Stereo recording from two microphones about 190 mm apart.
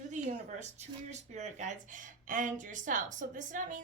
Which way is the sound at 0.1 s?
40° right (ahead or behind).